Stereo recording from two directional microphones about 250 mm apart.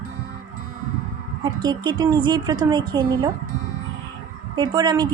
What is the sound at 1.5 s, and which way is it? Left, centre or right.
Speech, centre.